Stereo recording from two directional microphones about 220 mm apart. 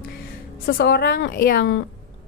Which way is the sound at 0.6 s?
50° left (ahead or behind).